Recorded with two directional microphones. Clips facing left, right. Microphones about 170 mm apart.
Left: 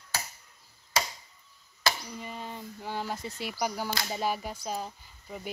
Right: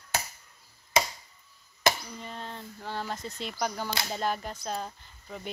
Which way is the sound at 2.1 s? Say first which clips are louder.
Left 1 dB; 10° left (ahead or behind).